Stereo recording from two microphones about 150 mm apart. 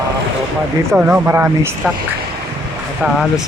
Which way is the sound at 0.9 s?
5° right (ahead or behind).